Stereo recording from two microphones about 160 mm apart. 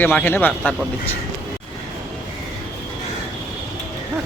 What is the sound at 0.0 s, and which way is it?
Speech, 10° left (ahead or behind).